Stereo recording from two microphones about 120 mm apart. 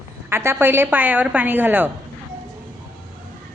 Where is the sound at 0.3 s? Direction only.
20° right (ahead or behind).